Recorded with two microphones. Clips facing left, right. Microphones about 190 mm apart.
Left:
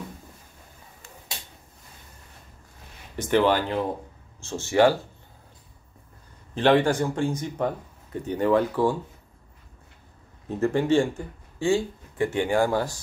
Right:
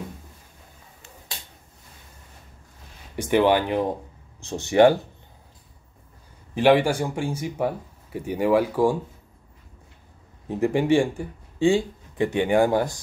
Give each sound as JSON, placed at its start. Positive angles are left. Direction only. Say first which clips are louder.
{"t": 3.2, "sound": "speech", "louder": "right 2 dB", "side_deg": -15}
{"t": 6.5, "sound": "speech", "louder": "right 2 dB", "side_deg": -10}
{"t": 10.5, "sound": "speech", "louder": "right 1 dB", "side_deg": -15}